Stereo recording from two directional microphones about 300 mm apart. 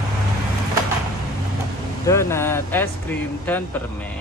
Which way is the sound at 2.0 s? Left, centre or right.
Centre.